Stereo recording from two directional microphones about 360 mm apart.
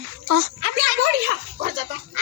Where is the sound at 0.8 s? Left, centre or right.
Right.